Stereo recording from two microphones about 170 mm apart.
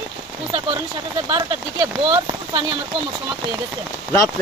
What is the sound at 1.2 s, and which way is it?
Speech, 30° right (ahead or behind).